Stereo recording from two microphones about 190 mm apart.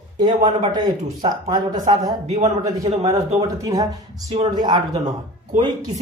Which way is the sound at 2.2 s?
35° right (ahead or behind).